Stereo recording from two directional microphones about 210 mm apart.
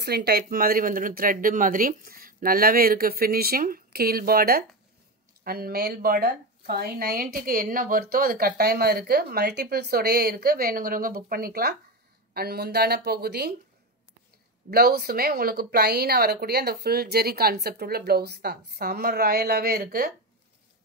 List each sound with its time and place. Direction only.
0.0 s a woman's voice: 50° right (ahead or behind)
14.7 s a woman's voice: 45° right (ahead or behind)